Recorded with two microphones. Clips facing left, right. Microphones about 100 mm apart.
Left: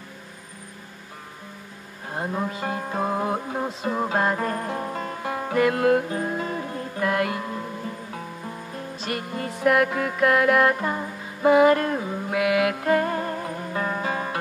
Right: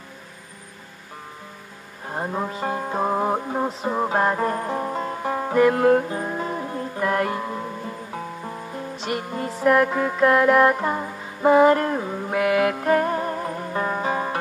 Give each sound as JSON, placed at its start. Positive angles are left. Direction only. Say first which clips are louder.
{"t": 2.0, "sound": "cattle", "louder": "right 1 dB", "side_deg": -15}
{"t": 2.8, "sound": "music", "louder": "right 3 dB", "side_deg": -20}
{"t": 12.4, "sound": "music", "louder": "right 2 dB", "side_deg": -35}
{"t": 12.8, "sound": "music", "louder": "right 2 dB", "side_deg": -15}